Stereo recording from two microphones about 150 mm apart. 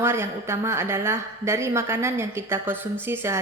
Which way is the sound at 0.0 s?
15° right (ahead or behind).